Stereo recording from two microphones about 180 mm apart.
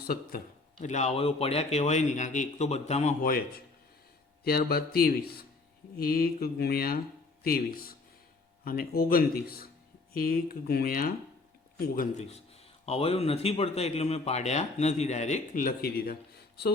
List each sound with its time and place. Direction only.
0.0 s speech: 55° left (ahead or behind)
0.8 s a man's voice: 40° left (ahead or behind)
3.2 s speech: 55° left (ahead or behind)
12.1 s a man's voice: 35° left (ahead or behind); by 16.7 s 60° left (ahead or behind)